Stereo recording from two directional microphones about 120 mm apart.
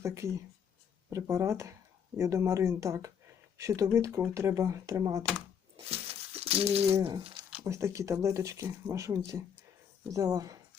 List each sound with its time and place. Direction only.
0.0 s speech: 25° right (ahead or behind)
5.9 s a sound: 55° right (ahead or behind)
7.6 s speech: 25° right (ahead or behind)